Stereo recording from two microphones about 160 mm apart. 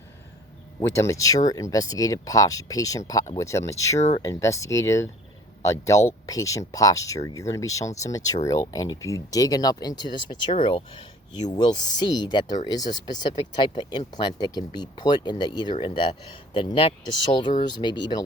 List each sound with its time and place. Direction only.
0.8 s speech: 15° left (ahead or behind)